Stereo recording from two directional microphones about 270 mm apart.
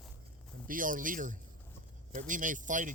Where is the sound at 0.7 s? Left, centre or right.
Right.